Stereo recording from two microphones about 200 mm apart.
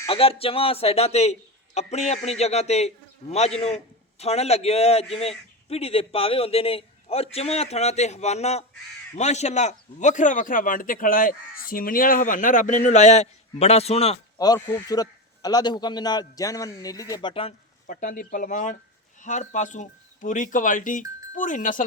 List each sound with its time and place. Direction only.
0.1 s a man's voice: 30° left (ahead or behind)
14.3 s a man's voice: 20° left (ahead or behind)
17.8 s a man's voice: 40° left (ahead or behind)